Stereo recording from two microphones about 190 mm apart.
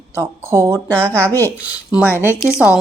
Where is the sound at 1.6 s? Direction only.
5° right (ahead or behind).